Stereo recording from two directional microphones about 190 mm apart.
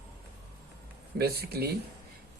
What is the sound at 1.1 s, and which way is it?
Speech, 55° right (ahead or behind).